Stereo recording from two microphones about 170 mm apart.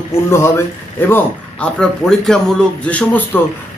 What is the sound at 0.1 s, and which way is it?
A man's voice, 15° left (ahead or behind).